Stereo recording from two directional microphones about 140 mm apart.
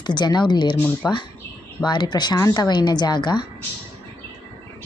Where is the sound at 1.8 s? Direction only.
30° left (ahead or behind).